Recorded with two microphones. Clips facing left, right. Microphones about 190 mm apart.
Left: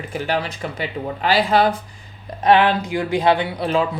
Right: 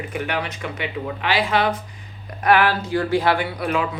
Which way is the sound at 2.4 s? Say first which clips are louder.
Left 3 dB; 20° left (ahead or behind).